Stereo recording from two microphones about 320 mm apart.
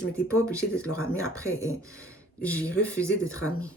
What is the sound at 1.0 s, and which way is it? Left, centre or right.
Speech, left.